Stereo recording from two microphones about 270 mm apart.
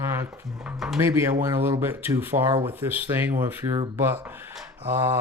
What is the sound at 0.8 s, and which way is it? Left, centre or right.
Speech, centre.